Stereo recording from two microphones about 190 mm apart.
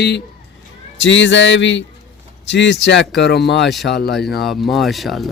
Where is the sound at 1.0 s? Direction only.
75° left (ahead or behind).